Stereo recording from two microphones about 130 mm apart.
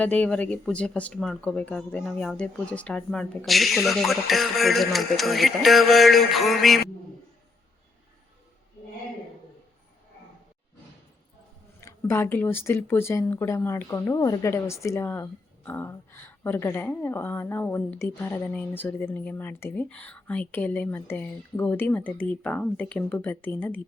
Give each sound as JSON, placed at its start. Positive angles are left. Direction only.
{"t": 0.0, "sound": "speech", "side_deg": 10}
{"t": 11.8, "sound": "a woman's voice", "side_deg": 20}